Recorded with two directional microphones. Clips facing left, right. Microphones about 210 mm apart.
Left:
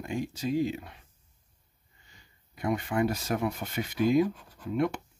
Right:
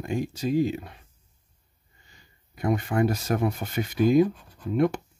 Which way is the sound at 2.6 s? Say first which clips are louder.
Right 4 dB; 45° right (ahead or behind).